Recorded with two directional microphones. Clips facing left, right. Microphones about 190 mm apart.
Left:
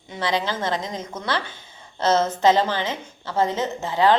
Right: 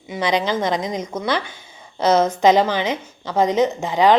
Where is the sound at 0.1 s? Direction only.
15° right (ahead or behind).